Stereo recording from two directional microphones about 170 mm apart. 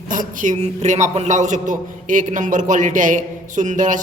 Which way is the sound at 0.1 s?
50° right (ahead or behind).